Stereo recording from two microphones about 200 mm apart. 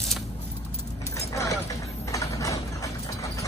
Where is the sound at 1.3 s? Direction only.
15° left (ahead or behind).